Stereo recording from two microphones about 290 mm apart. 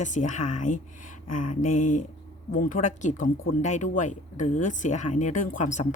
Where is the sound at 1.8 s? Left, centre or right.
Left.